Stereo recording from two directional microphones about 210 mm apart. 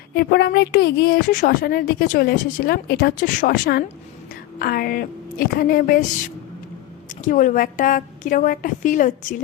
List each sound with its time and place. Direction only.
0.1 s a woman's voice: 50° left (ahead or behind)
7.1 s a woman's voice: 40° left (ahead or behind)